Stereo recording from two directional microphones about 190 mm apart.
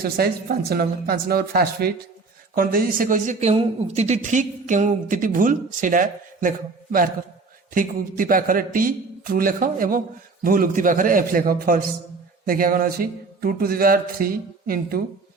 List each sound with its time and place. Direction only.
0.0 s a woman's voice: 55° right (ahead or behind)
7.7 s a woman's voice: 45° right (ahead or behind)